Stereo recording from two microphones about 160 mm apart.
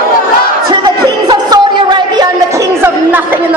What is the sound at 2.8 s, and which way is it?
Chatter, 10° right (ahead or behind).